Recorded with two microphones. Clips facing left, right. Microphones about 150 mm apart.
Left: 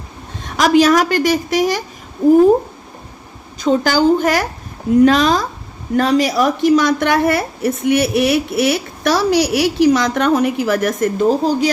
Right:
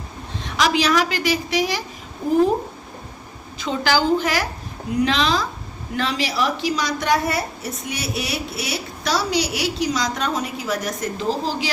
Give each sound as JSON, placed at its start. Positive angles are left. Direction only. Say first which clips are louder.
{"t": 0.4, "sound": "a woman's voice", "louder": "left 8 dB", "side_deg": 45}
{"t": 3.6, "sound": "a woman's voice", "louder": "left 7 dB", "side_deg": 45}